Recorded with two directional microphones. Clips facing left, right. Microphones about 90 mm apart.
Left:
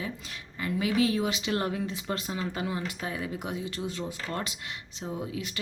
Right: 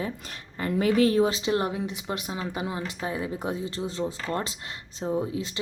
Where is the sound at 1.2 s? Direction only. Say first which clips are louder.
Right 5 dB; 30° right (ahead or behind).